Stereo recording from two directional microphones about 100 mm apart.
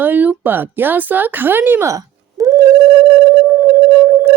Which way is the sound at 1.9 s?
35° right (ahead or behind).